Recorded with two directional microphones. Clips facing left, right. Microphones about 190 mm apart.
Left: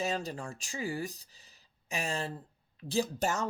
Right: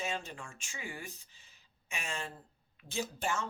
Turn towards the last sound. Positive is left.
turn(degrees=40)  # may be behind; listen again after turning